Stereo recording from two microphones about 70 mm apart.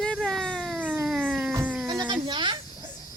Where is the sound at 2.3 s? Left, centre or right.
Right.